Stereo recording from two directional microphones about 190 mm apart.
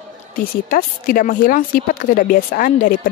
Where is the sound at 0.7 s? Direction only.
45° left (ahead or behind).